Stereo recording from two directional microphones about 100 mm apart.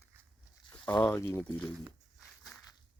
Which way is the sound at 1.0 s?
25° left (ahead or behind).